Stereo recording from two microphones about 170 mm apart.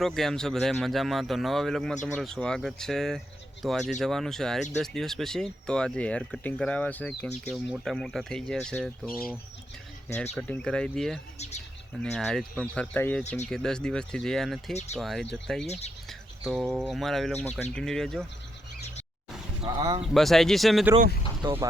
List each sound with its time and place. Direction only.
0.0 s speech: centre (ahead or behind)
10.3 s speech: 10° left (ahead or behind)
13.2 s speech: 40° left (ahead or behind)
13.5 s speech: 5° left (ahead or behind)
14.7 s speech: 40° left (ahead or behind)
14.9 s speech: centre (ahead or behind)
19.6 s speech: 25° right (ahead or behind)
20.1 s speech: centre (ahead or behind)
21.4 s speech: 25° right (ahead or behind)